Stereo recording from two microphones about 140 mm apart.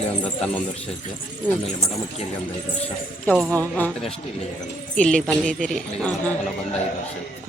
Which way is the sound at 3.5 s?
10° left (ahead or behind).